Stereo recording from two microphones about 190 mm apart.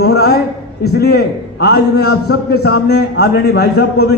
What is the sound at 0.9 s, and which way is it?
A man's voice, 60° left (ahead or behind).